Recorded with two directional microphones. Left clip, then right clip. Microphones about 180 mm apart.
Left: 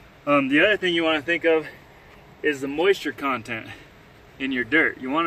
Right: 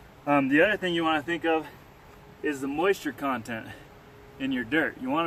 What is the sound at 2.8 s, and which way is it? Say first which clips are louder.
Speech: left 5 dB; 30° right (ahead or behind).